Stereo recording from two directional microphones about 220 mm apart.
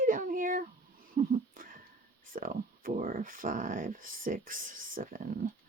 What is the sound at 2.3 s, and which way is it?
Speech, 40° right (ahead or behind).